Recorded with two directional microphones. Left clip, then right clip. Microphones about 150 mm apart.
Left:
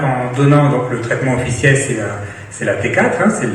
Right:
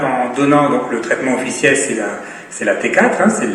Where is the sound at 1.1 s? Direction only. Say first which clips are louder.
Right 2 dB; 40° right (ahead or behind).